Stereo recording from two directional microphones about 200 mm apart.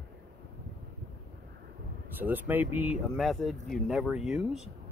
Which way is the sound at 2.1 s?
10° right (ahead or behind).